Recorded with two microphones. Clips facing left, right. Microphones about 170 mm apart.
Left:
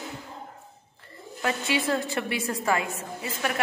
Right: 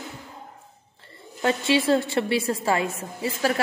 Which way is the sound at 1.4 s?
30° right (ahead or behind).